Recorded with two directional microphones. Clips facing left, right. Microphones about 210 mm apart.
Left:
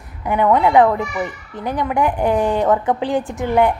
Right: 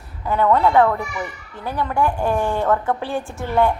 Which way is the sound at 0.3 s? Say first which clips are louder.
Left 2 dB; 15° left (ahead or behind).